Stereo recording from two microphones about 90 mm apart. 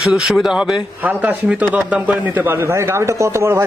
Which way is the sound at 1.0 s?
20° right (ahead or behind).